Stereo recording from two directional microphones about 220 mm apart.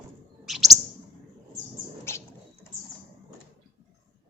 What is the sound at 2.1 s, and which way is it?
Rodents, 10° left (ahead or behind).